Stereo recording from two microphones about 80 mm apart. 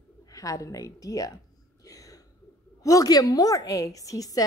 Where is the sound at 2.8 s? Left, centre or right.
Left.